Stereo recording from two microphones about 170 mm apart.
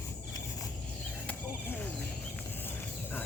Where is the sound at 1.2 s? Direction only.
10° left (ahead or behind).